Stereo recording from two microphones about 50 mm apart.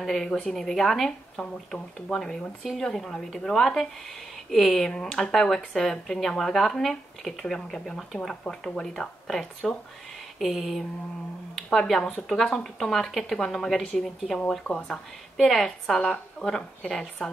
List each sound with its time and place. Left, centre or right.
0.0 s speech: centre
14.5 s speech: centre
15.3 s speech: centre